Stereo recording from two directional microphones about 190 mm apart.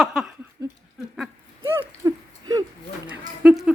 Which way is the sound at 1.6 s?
15° right (ahead or behind).